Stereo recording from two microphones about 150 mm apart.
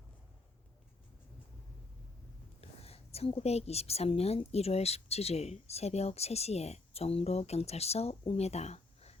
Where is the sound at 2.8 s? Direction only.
45° left (ahead or behind).